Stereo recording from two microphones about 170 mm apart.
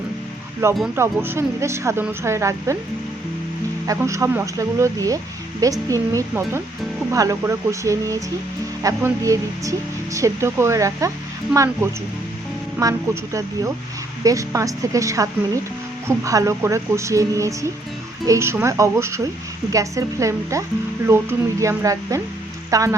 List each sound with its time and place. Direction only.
0.6 s speech: 15° right (ahead or behind)
3.8 s speech: 20° right (ahead or behind)